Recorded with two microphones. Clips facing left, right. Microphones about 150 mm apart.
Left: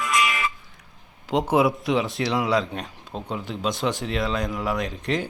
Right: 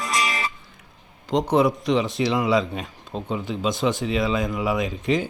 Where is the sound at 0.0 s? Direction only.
35° right (ahead or behind).